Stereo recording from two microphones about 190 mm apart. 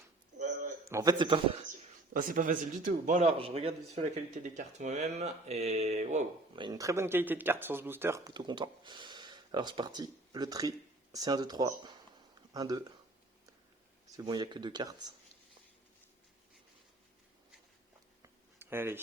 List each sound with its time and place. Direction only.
0.9 s speech: 15° right (ahead or behind)
2.1 s speech: 45° right (ahead or behind)
3.3 s speech: 30° right (ahead or behind)
6.6 s speech: 20° right (ahead or behind)
14.2 s speech: 20° right (ahead or behind)
18.2 s a sound: 10° right (ahead or behind)